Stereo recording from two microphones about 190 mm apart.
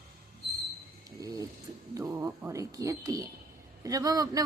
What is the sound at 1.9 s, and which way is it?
Music, 15° right (ahead or behind).